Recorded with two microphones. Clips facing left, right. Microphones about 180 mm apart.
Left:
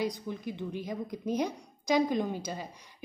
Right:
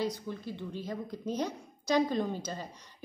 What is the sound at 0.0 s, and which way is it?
A woman's voice, 15° left (ahead or behind).